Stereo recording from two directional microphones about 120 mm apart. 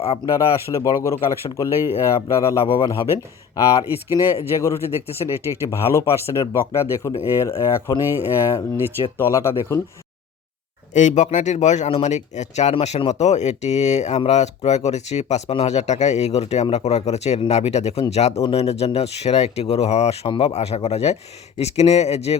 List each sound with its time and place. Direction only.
0.3 s speech: 30° left (ahead or behind)
10.9 s a man's voice: 90° left; by 20.1 s 65° left (ahead or behind)
20.2 s speech: 45° left (ahead or behind)
20.5 s speech: 65° left (ahead or behind)